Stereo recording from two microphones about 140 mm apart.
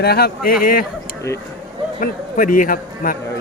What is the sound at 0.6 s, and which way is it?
Speech, 90° left.